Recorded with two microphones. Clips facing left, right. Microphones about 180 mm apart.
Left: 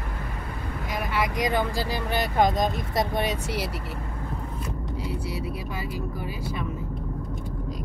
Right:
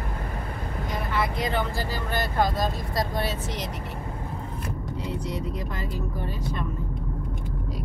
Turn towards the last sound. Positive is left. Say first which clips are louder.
# even
turn(degrees=10)  # may be behind; listen again after turning